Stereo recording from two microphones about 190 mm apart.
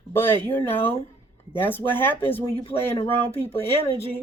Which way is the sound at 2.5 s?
30° left (ahead or behind).